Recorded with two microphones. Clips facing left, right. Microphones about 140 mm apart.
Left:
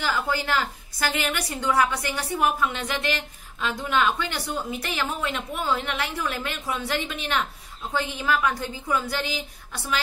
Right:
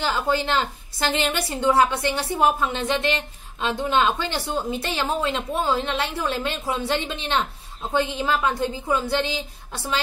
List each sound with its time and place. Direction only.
0.0 s a woman's voice: 25° right (ahead or behind)